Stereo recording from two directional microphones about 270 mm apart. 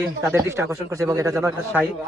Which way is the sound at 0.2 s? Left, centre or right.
Centre.